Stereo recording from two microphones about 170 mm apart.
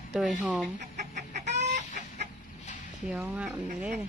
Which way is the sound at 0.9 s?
45° right (ahead or behind).